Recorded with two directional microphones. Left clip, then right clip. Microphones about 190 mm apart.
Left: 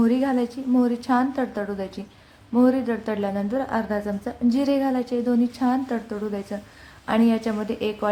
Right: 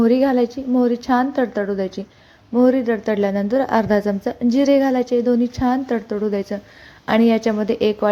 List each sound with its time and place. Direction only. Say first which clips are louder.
0.0 s a woman's voice: right 7 dB; 20° right (ahead or behind)